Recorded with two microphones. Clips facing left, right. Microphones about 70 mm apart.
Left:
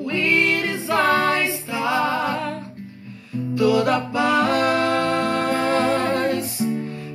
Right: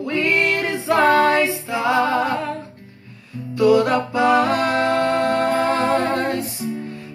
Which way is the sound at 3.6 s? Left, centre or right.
Right.